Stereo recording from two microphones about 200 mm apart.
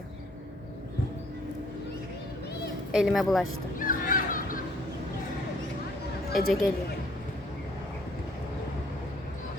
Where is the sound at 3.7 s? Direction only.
45° left (ahead or behind).